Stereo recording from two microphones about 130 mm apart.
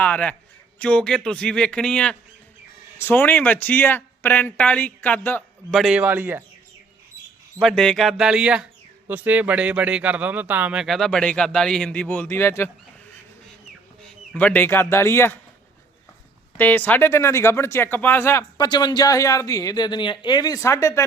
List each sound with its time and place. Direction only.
0.0 s speech: 10° left (ahead or behind)
5.7 s a man's voice: 5° right (ahead or behind)
7.6 s speech: 5° left (ahead or behind); by 12.7 s 20° left (ahead or behind)
14.3 s speech: 15° left (ahead or behind)
16.6 s a woman's voice: 15° left (ahead or behind)
18.5 s a woman's voice: 35° left (ahead or behind)